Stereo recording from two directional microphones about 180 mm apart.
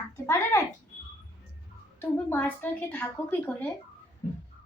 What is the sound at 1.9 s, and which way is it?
A woman's voice, 10° left (ahead or behind).